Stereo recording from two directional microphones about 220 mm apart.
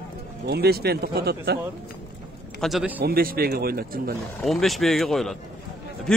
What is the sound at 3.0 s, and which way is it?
Speech, 45° right (ahead or behind).